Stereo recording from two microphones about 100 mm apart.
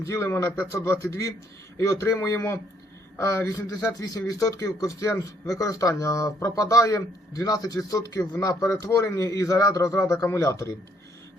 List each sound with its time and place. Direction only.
0.0 s a man's voice: 25° left (ahead or behind)